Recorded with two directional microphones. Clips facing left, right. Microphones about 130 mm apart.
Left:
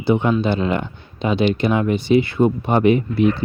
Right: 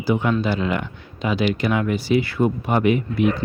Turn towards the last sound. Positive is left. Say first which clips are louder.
# left 3 dB
turn(degrees=30)  # may be behind; listen again after turning